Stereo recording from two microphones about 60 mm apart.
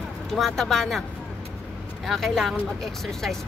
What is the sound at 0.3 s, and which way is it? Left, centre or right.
Speech, centre.